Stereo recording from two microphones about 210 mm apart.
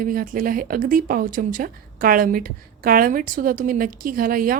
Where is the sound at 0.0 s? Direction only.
40° right (ahead or behind).